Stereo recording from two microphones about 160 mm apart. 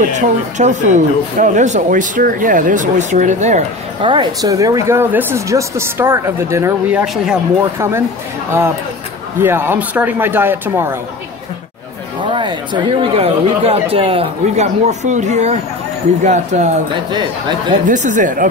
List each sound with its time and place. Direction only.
0.0 s speech: 50° right (ahead or behind)
4.0 s speech: 30° right (ahead or behind); by 7.3 s 10° right (ahead or behind)
8.5 s speech: 15° right (ahead or behind)
12.2 s speech: 30° right (ahead or behind); by 16.7 s 45° right (ahead or behind)
17.1 s speech: 30° right (ahead or behind)
17.8 s speech: 50° right (ahead or behind)